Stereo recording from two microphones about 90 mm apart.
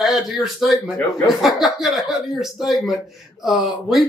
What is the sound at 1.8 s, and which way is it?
Speech, 5° right (ahead or behind).